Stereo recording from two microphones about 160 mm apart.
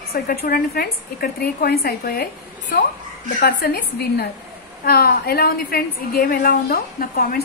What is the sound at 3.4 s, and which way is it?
A woman's voice, 85° left.